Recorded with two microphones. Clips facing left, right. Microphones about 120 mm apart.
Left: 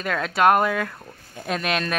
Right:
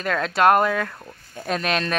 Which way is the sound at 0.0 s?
5° left (ahead or behind).